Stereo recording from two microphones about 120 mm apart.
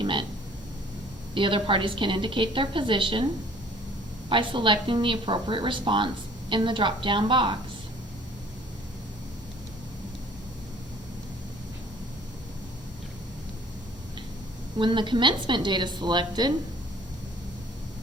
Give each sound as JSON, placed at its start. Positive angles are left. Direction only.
{"t": 0.0, "sound": "a sound", "side_deg": -45}
{"t": 1.3, "sound": "a woman's voice", "side_deg": -45}
{"t": 4.3, "sound": "a woman's voice", "side_deg": -45}
{"t": 14.8, "sound": "a woman's voice", "side_deg": -40}